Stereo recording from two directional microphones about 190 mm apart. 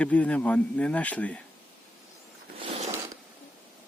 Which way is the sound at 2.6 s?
35° right (ahead or behind).